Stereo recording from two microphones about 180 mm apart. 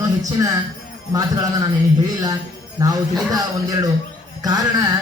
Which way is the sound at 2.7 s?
20° right (ahead or behind).